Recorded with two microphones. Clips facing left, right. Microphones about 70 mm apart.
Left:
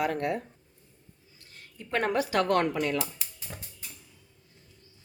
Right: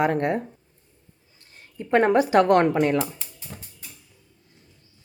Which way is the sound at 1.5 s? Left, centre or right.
Right.